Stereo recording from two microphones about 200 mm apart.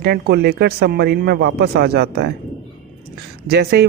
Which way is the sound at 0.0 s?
55° right (ahead or behind).